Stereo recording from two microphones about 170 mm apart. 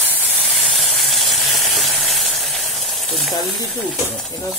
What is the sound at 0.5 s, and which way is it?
Sizzle, centre (ahead or behind).